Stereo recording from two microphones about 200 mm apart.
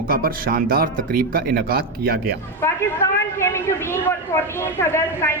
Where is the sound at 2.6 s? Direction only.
15° left (ahead or behind).